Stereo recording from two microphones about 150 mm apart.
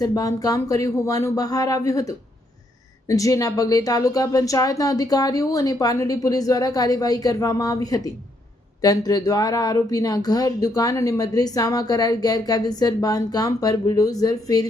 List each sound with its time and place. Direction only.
0.0 s speech: 25° left (ahead or behind)